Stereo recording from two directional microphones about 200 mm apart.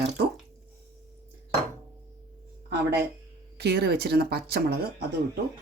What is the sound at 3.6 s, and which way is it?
Speech, 55° right (ahead or behind).